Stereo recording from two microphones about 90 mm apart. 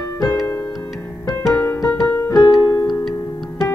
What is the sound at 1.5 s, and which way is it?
Music, 35° left (ahead or behind).